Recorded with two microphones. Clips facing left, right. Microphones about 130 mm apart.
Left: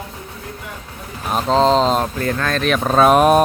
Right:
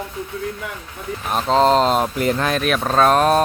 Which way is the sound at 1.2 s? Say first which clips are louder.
Left 1 dB; centre (ahead or behind).